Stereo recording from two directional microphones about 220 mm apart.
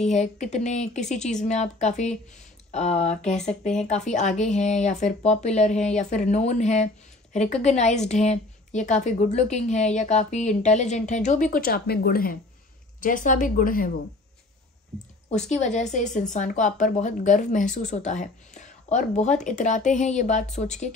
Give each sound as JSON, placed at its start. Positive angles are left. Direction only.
{"t": 0.0, "sound": "speech", "side_deg": 30}
{"t": 15.5, "sound": "speech", "side_deg": 30}